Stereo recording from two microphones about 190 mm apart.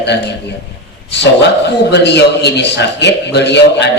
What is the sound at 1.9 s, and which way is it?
A man's voice, 65° left (ahead or behind).